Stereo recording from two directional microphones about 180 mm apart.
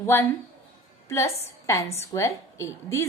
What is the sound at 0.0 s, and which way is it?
A woman's voice, 15° left (ahead or behind).